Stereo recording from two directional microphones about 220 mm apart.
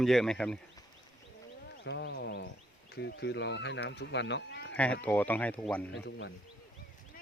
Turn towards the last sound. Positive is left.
turn(degrees=55)  # may be behind; listen again after turning